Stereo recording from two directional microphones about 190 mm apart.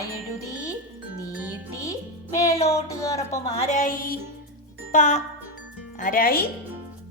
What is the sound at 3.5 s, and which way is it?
Speech, 40° left (ahead or behind).